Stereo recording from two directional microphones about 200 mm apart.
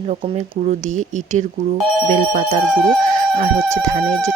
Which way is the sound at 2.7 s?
Centre (ahead or behind).